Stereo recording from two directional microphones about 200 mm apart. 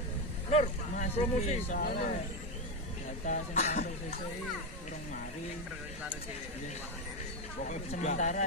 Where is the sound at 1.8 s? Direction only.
50° left (ahead or behind).